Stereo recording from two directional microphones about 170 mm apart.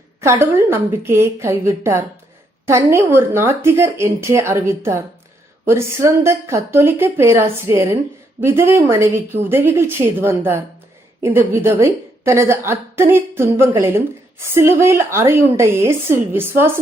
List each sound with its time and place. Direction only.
0.2 s a woman's voice: 15° right (ahead or behind)